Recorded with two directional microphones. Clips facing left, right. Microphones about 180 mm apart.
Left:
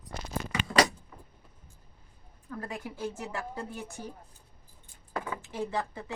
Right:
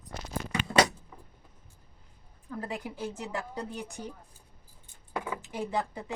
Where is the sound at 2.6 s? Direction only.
15° right (ahead or behind).